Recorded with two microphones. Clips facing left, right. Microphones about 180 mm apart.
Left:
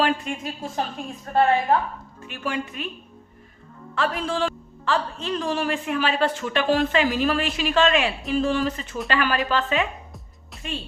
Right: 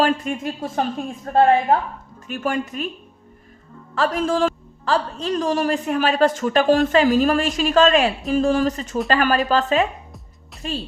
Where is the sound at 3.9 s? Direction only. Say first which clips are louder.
Right 5 dB; 40° right (ahead or behind).